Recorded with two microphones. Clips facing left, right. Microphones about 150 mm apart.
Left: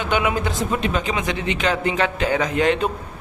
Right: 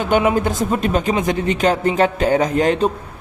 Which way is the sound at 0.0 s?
40° right (ahead or behind).